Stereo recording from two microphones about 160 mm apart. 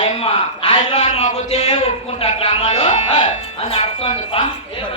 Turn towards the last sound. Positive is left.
turn(degrees=35)  # may be behind; listen again after turning